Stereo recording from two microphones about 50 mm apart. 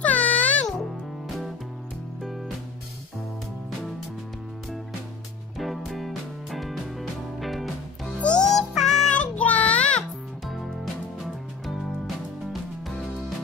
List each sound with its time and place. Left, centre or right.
0.0 s music: left
2.2 s music: centre
5.6 s music: centre
8.2 s music: left
8.5 s music: centre
9.1 s music: left